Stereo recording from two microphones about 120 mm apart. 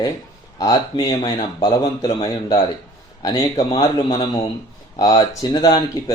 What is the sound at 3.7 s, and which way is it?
Speech, 35° left (ahead or behind).